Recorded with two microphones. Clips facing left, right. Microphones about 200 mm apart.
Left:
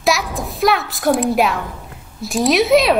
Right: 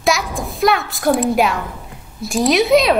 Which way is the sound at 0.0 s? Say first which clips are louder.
Even; centre (ahead or behind).